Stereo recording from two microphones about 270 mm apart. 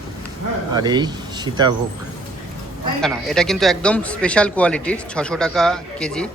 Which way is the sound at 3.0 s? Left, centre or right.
Centre.